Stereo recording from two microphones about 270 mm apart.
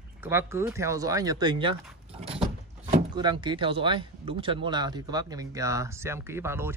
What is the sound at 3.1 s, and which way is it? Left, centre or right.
Speech, centre.